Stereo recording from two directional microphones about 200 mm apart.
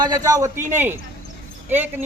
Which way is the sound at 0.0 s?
20° right (ahead or behind).